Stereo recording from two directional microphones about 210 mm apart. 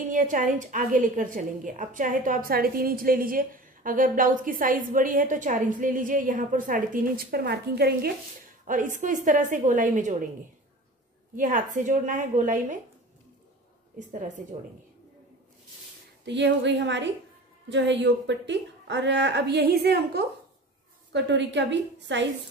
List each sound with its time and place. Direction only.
0.1 s a woman's voice: 40° right (ahead or behind)
8.6 s a woman's voice: 40° right (ahead or behind)
11.3 s a woman's voice: 40° right (ahead or behind)
13.9 s a woman's voice: 35° right (ahead or behind)
16.3 s a woman's voice: 55° right (ahead or behind)